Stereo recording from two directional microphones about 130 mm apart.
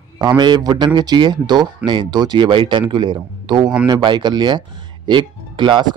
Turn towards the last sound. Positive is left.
turn(degrees=-35)  # may be behind; listen again after turning